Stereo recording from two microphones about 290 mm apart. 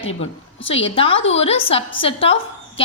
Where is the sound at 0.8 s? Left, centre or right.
Centre.